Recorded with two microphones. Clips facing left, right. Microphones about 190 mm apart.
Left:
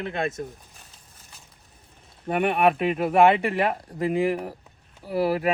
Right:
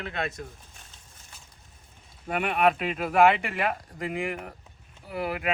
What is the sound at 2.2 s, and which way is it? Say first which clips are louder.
Speech: left 3 dB; 25° left (ahead or behind).